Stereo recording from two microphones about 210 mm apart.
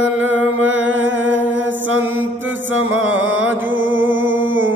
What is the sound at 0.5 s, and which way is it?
Chant, 65° right (ahead or behind).